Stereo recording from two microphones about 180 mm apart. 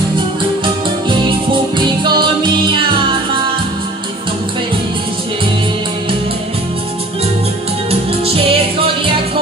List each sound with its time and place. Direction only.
1.0 s music: 25° right (ahead or behind)
7.9 s music: 30° right (ahead or behind)